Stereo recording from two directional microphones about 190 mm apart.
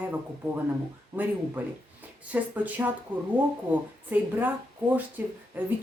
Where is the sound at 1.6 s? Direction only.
10° right (ahead or behind).